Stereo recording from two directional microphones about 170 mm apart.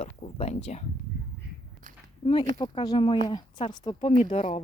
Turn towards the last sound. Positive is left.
turn(degrees=40)  # may be behind; listen again after turning